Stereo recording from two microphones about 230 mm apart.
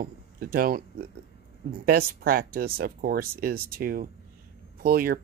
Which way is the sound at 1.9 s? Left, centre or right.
Right.